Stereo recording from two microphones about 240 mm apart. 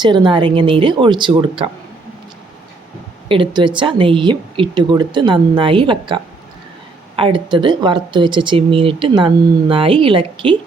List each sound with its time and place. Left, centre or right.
0.0 s speech: centre
3.2 s speech: right
7.2 s speech: right